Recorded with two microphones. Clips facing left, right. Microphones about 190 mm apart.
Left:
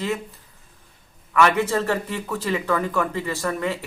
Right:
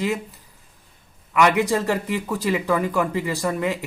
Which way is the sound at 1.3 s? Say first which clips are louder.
Right 1 dB; 15° right (ahead or behind).